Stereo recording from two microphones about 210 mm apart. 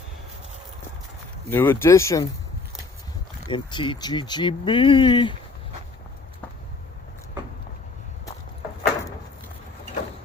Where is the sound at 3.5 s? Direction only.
25° left (ahead or behind).